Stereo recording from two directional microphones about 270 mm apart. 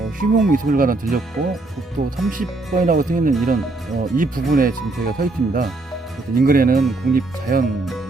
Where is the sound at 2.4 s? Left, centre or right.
Right.